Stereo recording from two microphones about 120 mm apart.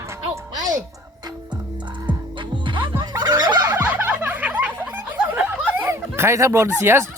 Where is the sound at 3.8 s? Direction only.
15° right (ahead or behind).